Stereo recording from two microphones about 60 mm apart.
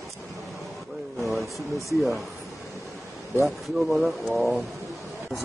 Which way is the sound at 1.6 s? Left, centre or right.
Right.